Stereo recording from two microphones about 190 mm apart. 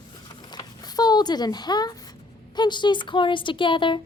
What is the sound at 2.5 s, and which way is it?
A woman's voice, 25° left (ahead or behind).